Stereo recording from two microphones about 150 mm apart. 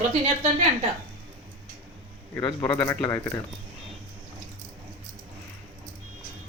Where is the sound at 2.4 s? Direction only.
20° left (ahead or behind).